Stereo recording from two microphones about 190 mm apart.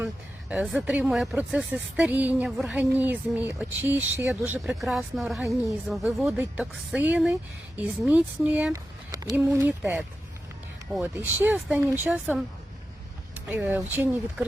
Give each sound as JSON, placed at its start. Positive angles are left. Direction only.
{"t": 0.0, "sound": "speech", "side_deg": -5}